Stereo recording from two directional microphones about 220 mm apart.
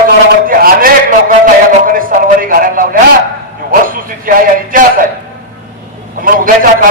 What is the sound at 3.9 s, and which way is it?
Speech, 40° right (ahead or behind).